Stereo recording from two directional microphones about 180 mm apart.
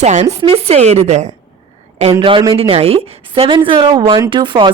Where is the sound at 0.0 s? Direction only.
40° right (ahead or behind).